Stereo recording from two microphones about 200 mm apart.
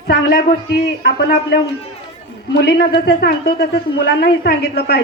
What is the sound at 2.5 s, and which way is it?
A woman's voice, 55° left (ahead or behind).